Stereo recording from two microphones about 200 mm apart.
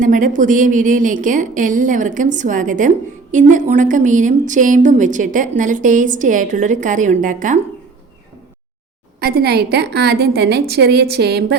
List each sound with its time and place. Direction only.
0.0 s speech: 40° right (ahead or behind)
9.2 s a woman's voice: 50° right (ahead or behind)